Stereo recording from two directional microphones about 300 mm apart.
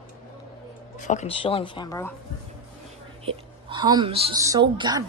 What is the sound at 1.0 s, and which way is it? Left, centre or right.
Speech, left.